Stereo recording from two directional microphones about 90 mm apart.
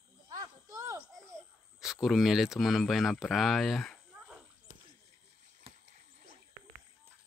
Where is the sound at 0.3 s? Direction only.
35° right (ahead or behind).